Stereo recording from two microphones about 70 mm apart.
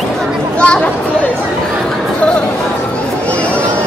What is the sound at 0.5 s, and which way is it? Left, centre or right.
Chatter, centre.